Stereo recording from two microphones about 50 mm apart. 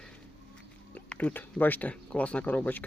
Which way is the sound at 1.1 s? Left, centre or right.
Left.